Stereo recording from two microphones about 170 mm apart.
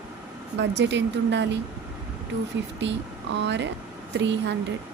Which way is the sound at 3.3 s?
90° right.